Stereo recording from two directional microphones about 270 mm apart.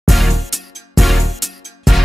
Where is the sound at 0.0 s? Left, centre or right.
Centre.